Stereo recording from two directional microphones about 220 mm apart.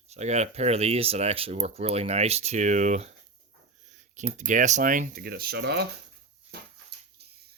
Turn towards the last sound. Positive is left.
turn(degrees=-50)  # may be behind; listen again after turning